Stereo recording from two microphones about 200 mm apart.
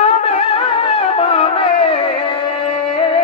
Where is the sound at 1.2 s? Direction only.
30° left (ahead or behind).